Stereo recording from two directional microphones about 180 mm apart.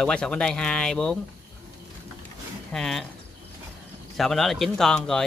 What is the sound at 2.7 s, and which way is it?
Speech, centre (ahead or behind).